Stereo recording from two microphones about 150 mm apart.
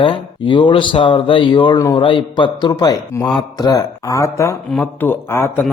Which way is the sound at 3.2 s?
Centre (ahead or behind).